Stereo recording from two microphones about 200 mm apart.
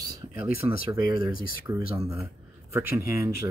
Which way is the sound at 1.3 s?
45° left (ahead or behind).